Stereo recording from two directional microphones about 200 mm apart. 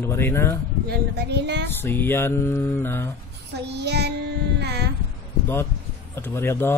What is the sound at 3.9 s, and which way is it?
Child singing, 55° right (ahead or behind).